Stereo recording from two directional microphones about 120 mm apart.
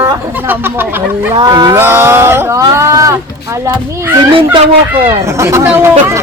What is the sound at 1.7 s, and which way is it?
Speech, 20° right (ahead or behind).